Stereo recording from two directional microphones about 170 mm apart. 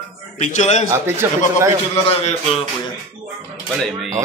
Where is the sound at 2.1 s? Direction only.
35° left (ahead or behind).